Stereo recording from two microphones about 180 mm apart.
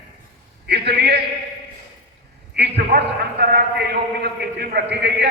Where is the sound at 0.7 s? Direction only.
65° right (ahead or behind).